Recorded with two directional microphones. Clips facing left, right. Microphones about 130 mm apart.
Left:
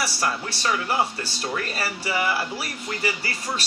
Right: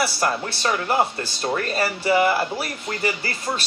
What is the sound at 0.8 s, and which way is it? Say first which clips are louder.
Speech: right 3 dB; 25° right (ahead or behind).